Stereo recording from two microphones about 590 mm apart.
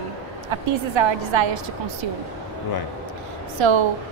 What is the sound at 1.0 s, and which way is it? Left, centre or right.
Speech, right.